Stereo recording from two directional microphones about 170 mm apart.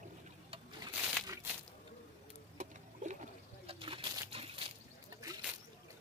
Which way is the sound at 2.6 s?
45° right (ahead or behind).